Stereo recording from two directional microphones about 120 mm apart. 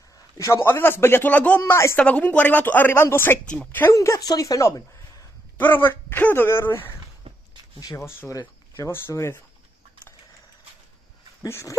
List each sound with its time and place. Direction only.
0.4 s speech: 25° left (ahead or behind)
1.6 s speech: 25° left (ahead or behind)
2.0 s speech: 10° left (ahead or behind); by 4.8 s 30° left (ahead or behind)
5.6 s speech: 15° left (ahead or behind)
7.2 s a sound: 45° right (ahead or behind)
7.8 s speech: 25° left (ahead or behind)
11.4 s speech: 25° left (ahead or behind)